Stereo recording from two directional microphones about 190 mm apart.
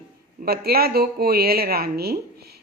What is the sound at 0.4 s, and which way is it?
Speech, 55° right (ahead or behind).